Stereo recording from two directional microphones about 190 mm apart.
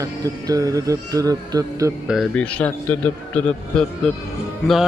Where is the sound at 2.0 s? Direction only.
Centre (ahead or behind).